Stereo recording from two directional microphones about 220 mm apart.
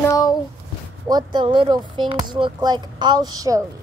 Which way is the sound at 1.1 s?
20° right (ahead or behind).